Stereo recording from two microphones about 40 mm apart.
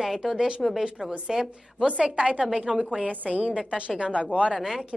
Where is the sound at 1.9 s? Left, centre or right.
Right.